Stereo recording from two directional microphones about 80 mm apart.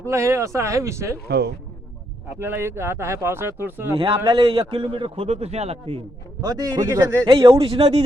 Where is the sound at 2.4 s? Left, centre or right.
Right.